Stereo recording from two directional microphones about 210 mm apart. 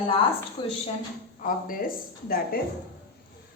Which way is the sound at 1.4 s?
40° left (ahead or behind).